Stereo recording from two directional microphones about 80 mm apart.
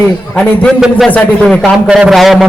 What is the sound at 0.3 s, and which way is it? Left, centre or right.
Speech, centre.